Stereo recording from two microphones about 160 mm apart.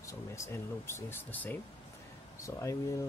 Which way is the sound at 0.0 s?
15° left (ahead or behind).